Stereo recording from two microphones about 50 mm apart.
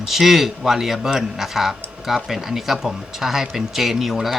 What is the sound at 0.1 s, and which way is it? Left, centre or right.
Speech, centre.